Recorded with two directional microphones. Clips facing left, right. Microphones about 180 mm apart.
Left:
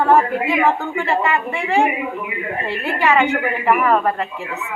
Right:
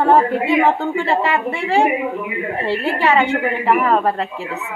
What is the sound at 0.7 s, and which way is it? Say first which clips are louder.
Speech: right 2 dB; 30° right (ahead or behind).